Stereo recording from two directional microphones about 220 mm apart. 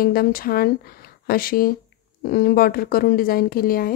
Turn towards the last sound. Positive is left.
turn(degrees=40)  # may be behind; listen again after turning